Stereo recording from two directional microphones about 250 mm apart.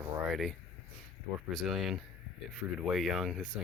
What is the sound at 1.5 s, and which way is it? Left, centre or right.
Speech, centre.